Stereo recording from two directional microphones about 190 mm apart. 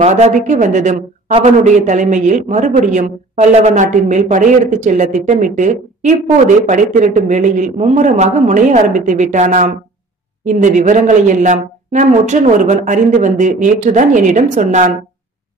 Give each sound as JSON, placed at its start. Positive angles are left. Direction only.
{"t": 0.0, "sound": "a woman's voice", "side_deg": -35}